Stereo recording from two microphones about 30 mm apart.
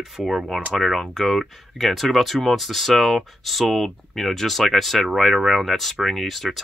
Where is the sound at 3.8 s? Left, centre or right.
Centre.